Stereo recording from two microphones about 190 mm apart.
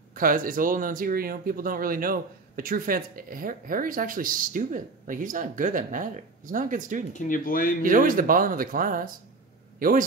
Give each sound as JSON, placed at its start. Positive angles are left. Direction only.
{"t": 0.1, "sound": "speech", "side_deg": -45}
{"t": 7.2, "sound": "speech", "side_deg": 45}
{"t": 7.8, "sound": "speech", "side_deg": -45}